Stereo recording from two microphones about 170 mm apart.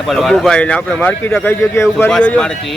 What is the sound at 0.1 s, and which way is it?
Speech, centre (ahead or behind).